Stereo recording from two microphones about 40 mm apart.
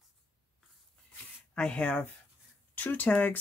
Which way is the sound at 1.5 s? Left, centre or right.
Left.